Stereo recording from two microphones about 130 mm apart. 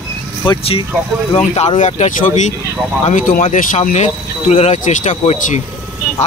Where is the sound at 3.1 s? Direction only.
90° left.